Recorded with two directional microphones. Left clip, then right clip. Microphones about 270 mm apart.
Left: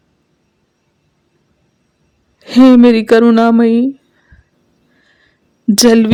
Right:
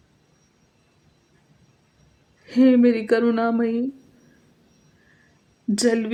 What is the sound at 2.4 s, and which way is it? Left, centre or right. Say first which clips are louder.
Speech: left 10 dB; left.